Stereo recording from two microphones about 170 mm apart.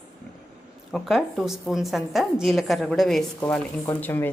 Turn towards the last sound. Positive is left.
turn(degrees=15)  # may be behind; listen again after turning